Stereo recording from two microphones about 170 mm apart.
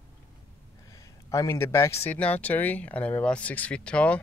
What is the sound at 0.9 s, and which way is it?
Speech, 20° left (ahead or behind).